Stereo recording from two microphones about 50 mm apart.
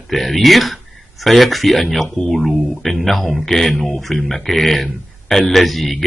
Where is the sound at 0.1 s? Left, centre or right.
Centre.